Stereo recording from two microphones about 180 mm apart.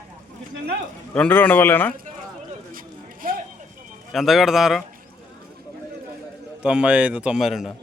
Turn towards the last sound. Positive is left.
turn(degrees=0)  # may be behind; listen again after turning